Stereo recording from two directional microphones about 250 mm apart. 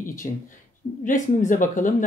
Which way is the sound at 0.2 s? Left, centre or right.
Left.